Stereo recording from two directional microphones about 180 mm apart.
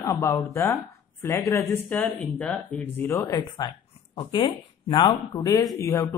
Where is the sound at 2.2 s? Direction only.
5° left (ahead or behind).